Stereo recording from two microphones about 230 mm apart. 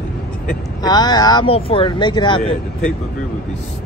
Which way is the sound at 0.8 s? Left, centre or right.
Centre.